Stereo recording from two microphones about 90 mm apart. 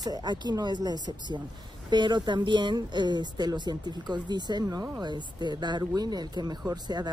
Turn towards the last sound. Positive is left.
turn(degrees=-50)  # may be behind; listen again after turning